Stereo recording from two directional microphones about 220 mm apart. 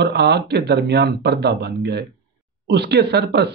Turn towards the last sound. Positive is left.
turn(degrees=-50)  # may be behind; listen again after turning